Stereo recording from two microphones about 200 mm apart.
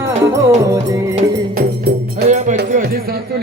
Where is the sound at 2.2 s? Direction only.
40° right (ahead or behind).